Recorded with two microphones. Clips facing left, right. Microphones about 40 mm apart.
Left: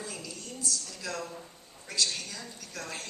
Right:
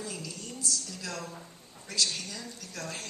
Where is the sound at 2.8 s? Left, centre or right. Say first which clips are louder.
Even; centre.